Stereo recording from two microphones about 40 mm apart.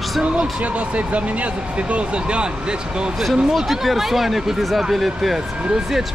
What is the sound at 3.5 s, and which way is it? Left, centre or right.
Speech, centre.